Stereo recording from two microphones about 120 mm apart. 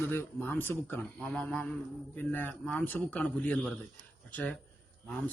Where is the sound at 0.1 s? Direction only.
20° left (ahead or behind).